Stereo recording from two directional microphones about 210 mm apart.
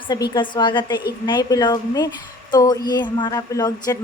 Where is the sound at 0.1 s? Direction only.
20° left (ahead or behind).